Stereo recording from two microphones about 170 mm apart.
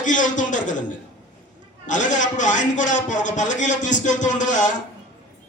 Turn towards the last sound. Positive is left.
turn(degrees=45)  # may be behind; listen again after turning